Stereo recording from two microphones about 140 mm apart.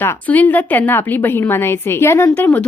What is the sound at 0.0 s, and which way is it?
A woman's voice, 15° left (ahead or behind).